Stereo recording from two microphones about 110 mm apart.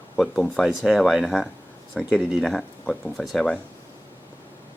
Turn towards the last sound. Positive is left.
turn(degrees=5)  # may be behind; listen again after turning